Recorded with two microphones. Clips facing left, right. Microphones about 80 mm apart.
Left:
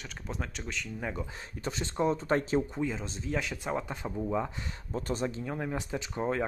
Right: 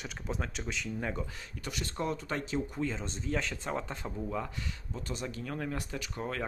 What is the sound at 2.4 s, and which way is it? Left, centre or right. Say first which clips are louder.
Speech: left 5 dB; left.